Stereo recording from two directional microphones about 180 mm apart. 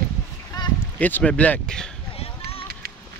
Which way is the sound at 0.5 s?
20° left (ahead or behind).